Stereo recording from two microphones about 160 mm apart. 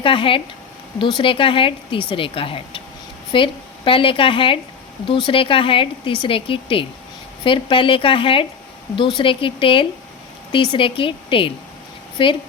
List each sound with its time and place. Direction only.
0.0 s speech: 35° left (ahead or behind)